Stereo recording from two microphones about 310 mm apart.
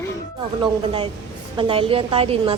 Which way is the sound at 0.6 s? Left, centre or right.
Centre.